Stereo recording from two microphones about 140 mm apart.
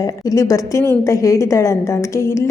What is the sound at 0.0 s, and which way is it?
A woman's voice, 25° left (ahead or behind).